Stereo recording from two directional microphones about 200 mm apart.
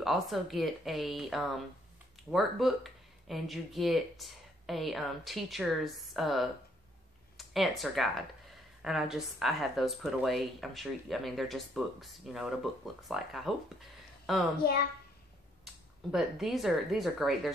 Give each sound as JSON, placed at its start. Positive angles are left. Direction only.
{"t": 0.0, "sound": "speech", "side_deg": 0}
{"t": 15.6, "sound": "speech", "side_deg": 0}